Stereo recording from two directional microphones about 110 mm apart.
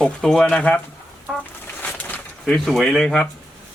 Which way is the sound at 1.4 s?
15° left (ahead or behind).